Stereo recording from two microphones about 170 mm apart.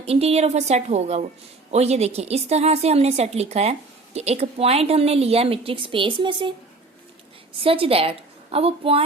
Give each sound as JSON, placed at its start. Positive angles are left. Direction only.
{"t": 0.0, "sound": "a woman's voice", "side_deg": -35}
{"t": 7.6, "sound": "a woman's voice", "side_deg": -35}